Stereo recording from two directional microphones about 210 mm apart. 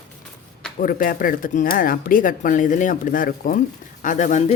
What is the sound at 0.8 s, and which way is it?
Speech, 40° left (ahead or behind).